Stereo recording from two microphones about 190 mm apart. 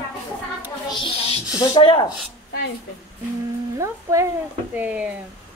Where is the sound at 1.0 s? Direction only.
30° left (ahead or behind).